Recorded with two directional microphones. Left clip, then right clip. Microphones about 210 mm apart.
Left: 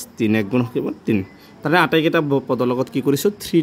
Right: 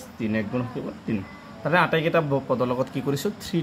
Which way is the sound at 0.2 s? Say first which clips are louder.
Left 8 dB; 65° left (ahead or behind).